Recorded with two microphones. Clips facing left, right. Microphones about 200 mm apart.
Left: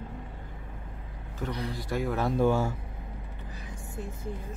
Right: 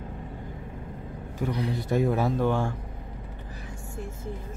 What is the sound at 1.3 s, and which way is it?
Speech, 15° right (ahead or behind).